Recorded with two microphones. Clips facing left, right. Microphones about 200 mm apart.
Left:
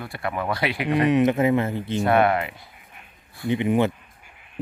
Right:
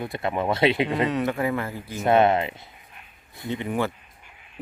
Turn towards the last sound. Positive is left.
turn(degrees=20)  # may be behind; listen again after turning